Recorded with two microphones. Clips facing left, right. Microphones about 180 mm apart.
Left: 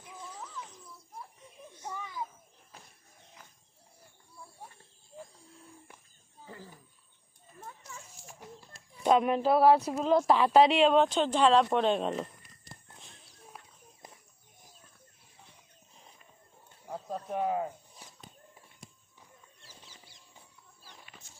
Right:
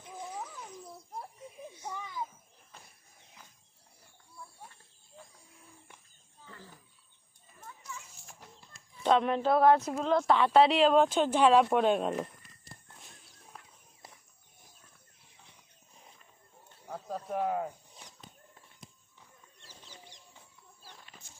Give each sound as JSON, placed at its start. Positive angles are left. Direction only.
{"t": 1.7, "sound": "children playing", "side_deg": -10}
{"t": 7.6, "sound": "children playing", "side_deg": 35}
{"t": 9.0, "sound": "speech", "side_deg": 10}
{"t": 13.5, "sound": "walk", "side_deg": 10}
{"t": 17.1, "sound": "a sound", "side_deg": 0}
{"t": 19.6, "sound": "a sound", "side_deg": 10}